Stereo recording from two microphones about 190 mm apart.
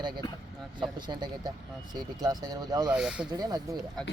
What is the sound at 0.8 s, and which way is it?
Speech, 25° right (ahead or behind).